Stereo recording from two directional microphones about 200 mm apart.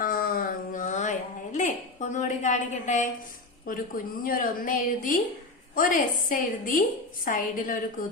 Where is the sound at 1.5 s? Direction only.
40° left (ahead or behind).